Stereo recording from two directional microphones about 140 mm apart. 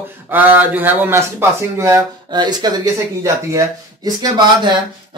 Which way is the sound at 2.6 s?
30° right (ahead or behind).